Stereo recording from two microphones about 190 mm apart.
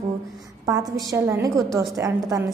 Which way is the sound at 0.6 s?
20° right (ahead or behind).